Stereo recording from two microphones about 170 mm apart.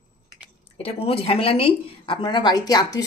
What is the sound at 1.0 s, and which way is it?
A woman's voice, 35° left (ahead or behind).